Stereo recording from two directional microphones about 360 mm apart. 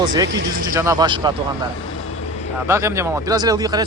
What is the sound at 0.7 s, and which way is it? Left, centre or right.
Speech, centre.